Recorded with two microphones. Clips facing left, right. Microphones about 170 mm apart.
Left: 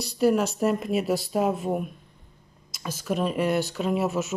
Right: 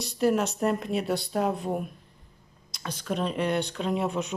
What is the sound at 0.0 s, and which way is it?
Speech, centre (ahead or behind).